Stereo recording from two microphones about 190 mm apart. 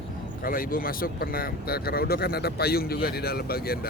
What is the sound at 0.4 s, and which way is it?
Speech, 50° left (ahead or behind).